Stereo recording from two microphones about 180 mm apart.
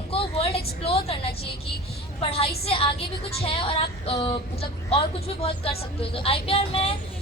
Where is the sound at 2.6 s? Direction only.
30° left (ahead or behind).